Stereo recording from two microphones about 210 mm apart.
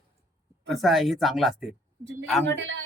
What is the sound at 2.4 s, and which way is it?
Speech, 60° right (ahead or behind).